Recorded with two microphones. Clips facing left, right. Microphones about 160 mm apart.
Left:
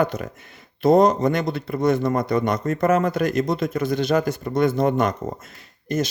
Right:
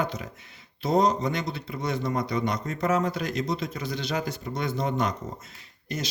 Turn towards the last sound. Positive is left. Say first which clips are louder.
# left 10 dB
turn(degrees=50)  # may be behind; listen again after turning